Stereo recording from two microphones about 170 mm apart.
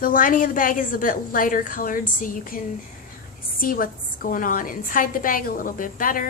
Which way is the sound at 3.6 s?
55° left (ahead or behind).